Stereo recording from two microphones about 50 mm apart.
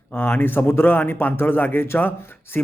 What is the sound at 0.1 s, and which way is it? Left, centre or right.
A man's voice, left.